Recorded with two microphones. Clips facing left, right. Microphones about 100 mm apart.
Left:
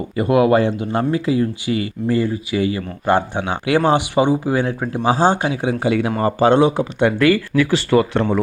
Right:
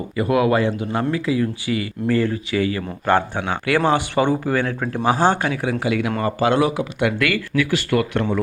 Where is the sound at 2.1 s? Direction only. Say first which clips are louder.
Left 1 dB; 15° left (ahead or behind); by 7.7 s 35° left (ahead or behind).